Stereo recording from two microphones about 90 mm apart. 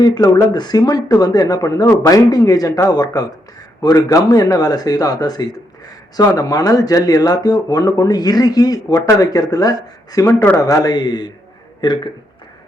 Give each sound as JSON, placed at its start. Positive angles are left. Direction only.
{"t": 0.0, "sound": "speech", "side_deg": 40}
{"t": 0.5, "sound": "speech", "side_deg": 50}
{"t": 10.2, "sound": "speech", "side_deg": 20}
{"t": 10.6, "sound": "speech", "side_deg": 40}
{"t": 10.9, "sound": "speech", "side_deg": 50}